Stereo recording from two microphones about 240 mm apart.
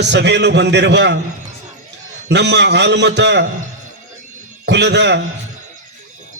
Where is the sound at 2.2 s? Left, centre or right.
Right.